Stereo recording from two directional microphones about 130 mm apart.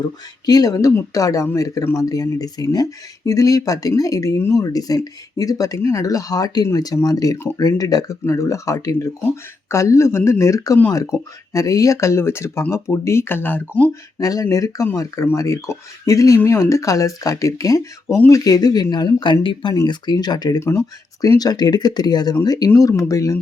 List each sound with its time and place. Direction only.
0.4 s speech: 30° left (ahead or behind); by 13.9 s 15° left (ahead or behind)
14.2 s speech: 25° left (ahead or behind)
20.6 s speech: 20° left (ahead or behind)